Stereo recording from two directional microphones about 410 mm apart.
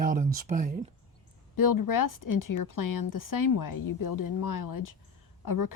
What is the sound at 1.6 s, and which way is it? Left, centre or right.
A woman's voice, left.